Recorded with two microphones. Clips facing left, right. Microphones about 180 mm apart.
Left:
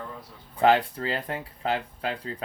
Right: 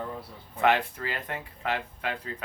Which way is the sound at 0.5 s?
30° left (ahead or behind).